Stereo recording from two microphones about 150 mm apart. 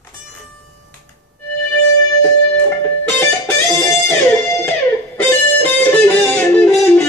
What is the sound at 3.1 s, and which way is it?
Music, 15° left (ahead or behind).